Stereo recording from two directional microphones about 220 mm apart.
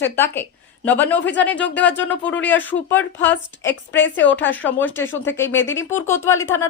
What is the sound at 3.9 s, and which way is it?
Speech, 55° left (ahead or behind).